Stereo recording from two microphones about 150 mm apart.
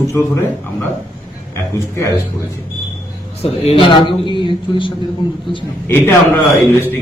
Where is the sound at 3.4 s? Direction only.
40° left (ahead or behind).